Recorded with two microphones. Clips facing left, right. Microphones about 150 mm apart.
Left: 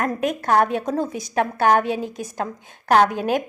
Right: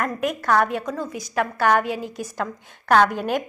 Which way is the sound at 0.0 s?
25° left (ahead or behind).